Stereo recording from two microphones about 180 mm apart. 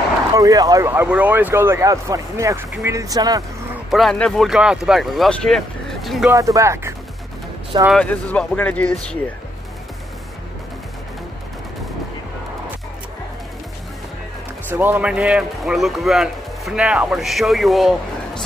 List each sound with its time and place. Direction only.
0.4 s speech: 20° right (ahead or behind)
3.9 s a man's voice: centre (ahead or behind)
6.3 s speech: 20° right (ahead or behind)
7.9 s speech: 5° left (ahead or behind)
14.7 s a man's voice: 10° right (ahead or behind)